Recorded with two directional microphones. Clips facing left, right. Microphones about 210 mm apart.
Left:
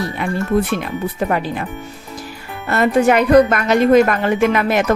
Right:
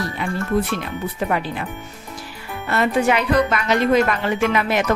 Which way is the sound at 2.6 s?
45° left (ahead or behind).